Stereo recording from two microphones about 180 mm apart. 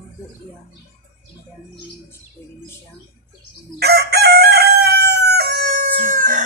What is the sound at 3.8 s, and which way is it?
Chicken, 65° right (ahead or behind).